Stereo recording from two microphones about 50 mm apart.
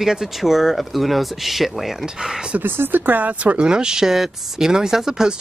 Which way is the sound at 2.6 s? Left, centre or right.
Right.